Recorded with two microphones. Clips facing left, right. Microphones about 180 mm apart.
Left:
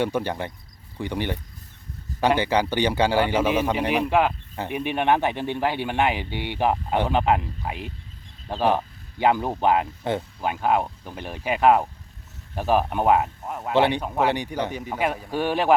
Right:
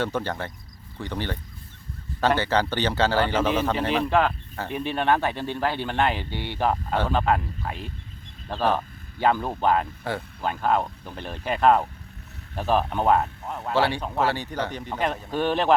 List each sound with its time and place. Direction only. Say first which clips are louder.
0.0 s a man's voice: left 2 dB; 15° left (ahead or behind)